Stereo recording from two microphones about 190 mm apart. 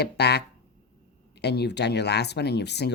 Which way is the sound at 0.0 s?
60° left (ahead or behind).